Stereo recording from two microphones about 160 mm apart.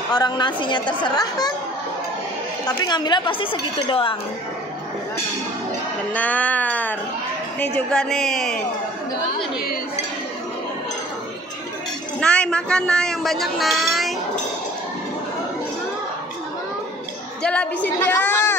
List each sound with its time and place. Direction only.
0.1 s a woman's voice: 25° left (ahead or behind)
2.8 s a woman's voice: 25° left (ahead or behind)
6.1 s music: 10° left (ahead or behind)
7.5 s a man's voice: 10° left (ahead or behind)
12.2 s a man's voice: 5° left (ahead or behind)
17.4 s a woman's voice: 5° left (ahead or behind)